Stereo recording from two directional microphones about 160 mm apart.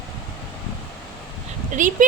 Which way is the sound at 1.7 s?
50° right (ahead or behind).